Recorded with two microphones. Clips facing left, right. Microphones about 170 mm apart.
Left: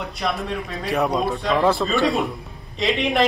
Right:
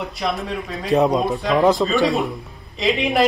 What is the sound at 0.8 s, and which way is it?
Speech, 20° right (ahead or behind).